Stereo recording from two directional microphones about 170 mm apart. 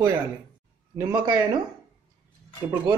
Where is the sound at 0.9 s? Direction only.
20° right (ahead or behind).